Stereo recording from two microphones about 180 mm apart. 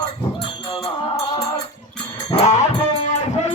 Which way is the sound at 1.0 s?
20° left (ahead or behind).